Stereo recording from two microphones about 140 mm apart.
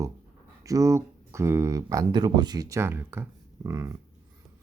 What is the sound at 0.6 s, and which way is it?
Speech, 25° right (ahead or behind).